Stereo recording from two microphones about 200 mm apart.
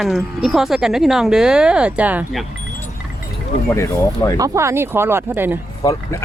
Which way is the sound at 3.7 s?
10° left (ahead or behind).